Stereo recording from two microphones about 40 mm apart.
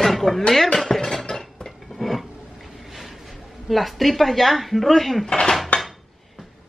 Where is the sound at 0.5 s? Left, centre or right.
Centre.